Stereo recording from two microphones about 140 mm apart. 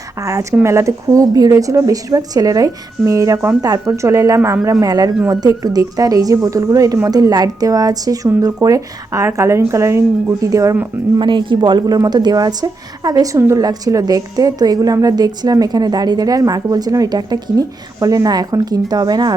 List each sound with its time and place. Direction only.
0.2 s a woman's voice: 20° right (ahead or behind)
11.2 s a woman's voice: 35° right (ahead or behind)